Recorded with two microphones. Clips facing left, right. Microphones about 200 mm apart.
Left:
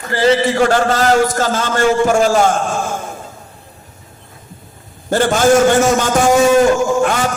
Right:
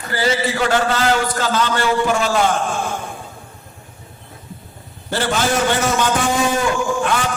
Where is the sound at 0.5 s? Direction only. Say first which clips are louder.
Left 5 dB; 45° left (ahead or behind).